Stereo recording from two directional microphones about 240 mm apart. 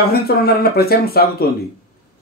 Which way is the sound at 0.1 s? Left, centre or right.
Left.